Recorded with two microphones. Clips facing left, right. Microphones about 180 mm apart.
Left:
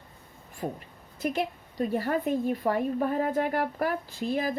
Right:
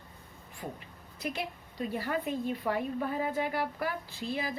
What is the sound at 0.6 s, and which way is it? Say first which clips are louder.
A woman's voice: left 7 dB; 50° left (ahead or behind).